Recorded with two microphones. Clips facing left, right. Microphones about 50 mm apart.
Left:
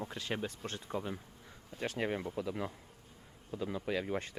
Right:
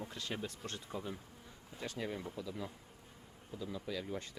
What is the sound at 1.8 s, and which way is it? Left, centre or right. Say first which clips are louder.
Speech: left 6 dB; left.